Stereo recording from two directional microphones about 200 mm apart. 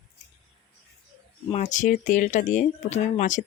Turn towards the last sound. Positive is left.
turn(degrees=40)  # may be behind; listen again after turning